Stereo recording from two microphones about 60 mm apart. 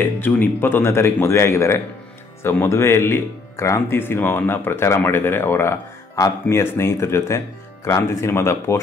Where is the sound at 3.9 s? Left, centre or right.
Left.